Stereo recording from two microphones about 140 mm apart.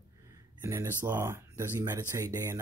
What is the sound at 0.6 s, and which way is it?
Speech, 20° right (ahead or behind).